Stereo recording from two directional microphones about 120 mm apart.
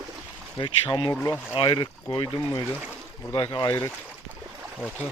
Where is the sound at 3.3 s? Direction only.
35° left (ahead or behind).